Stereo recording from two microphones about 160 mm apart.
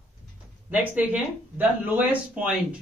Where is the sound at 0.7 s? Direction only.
10° right (ahead or behind).